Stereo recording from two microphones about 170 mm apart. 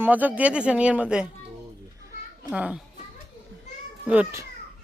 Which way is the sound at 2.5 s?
10° right (ahead or behind).